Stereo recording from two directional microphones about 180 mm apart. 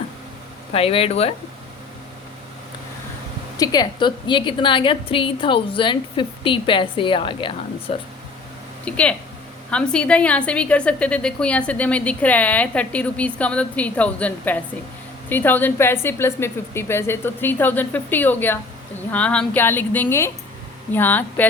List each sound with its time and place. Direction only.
0.7 s speech: 30° left (ahead or behind)
3.6 s a woman's voice: 20° left (ahead or behind)
8.8 s a woman's voice: 5° left (ahead or behind)